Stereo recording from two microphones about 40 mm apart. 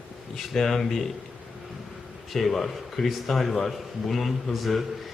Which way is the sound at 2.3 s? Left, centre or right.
Centre.